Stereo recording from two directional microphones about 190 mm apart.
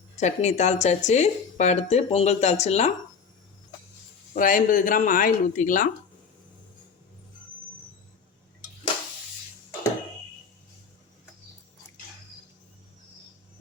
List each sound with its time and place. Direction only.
0.2 s speech: 35° left (ahead or behind)
4.4 s speech: 45° left (ahead or behind)